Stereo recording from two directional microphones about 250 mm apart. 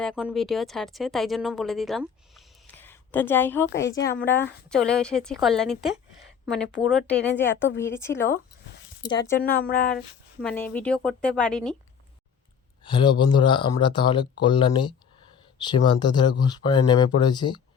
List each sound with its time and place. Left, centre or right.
0.0 s speech: centre
9.4 s speech: left
10.4 s speech: centre
12.8 s speech: centre